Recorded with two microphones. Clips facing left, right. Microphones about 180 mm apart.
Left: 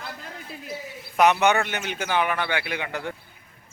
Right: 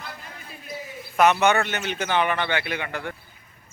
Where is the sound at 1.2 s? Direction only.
15° left (ahead or behind).